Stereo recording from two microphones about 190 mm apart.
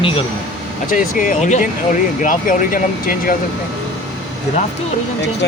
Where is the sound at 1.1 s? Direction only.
40° left (ahead or behind).